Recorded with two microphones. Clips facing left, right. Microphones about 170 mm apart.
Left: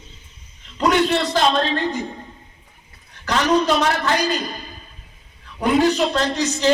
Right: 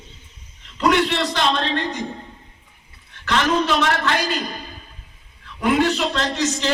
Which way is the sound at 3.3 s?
40° left (ahead or behind).